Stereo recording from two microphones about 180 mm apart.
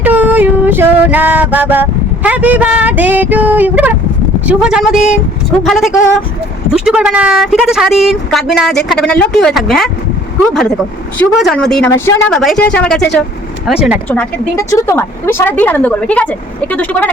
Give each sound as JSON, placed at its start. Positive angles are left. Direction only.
{"t": 0.0, "sound": "a sound", "side_deg": -10}
{"t": 4.4, "sound": "a woman's voice", "side_deg": -5}
{"t": 11.3, "sound": "a woman's voice", "side_deg": 0}
{"t": 12.3, "sound": "a woman's voice", "side_deg": 0}
{"t": 13.7, "sound": "a woman's voice", "side_deg": -5}
{"t": 14.1, "sound": "a woman's voice", "side_deg": 10}